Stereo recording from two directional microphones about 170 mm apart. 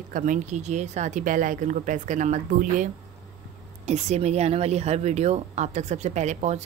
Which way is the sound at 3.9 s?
40° right (ahead or behind).